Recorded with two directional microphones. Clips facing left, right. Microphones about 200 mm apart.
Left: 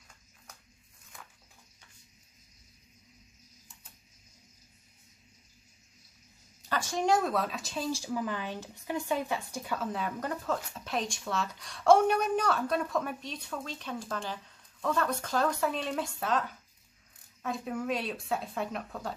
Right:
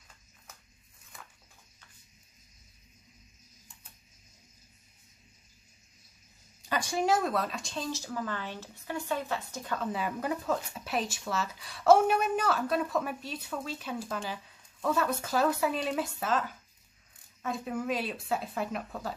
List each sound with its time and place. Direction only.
6.7 s speech: 15° right (ahead or behind); by 9.8 s 10° left (ahead or behind)
9.8 s speech: 5° right (ahead or behind)